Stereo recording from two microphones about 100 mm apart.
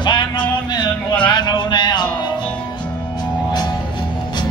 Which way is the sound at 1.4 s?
45° left (ahead or behind).